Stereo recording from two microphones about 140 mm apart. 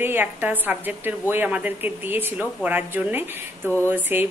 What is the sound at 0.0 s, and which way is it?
Speech, 15° right (ahead or behind).